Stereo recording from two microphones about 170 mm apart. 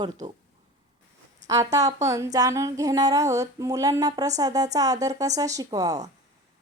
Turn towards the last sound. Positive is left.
turn(degrees=-20)  # may be behind; listen again after turning